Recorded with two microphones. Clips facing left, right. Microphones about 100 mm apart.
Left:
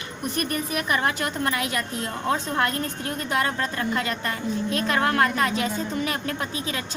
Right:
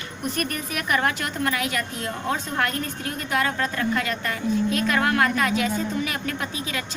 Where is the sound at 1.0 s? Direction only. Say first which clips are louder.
Even; 25° left (ahead or behind).